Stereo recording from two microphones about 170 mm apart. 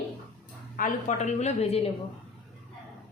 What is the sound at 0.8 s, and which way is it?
A woman's voice, 50° left (ahead or behind).